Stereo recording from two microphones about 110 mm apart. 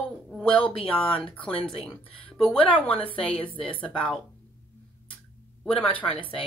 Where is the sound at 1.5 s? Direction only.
55° left (ahead or behind).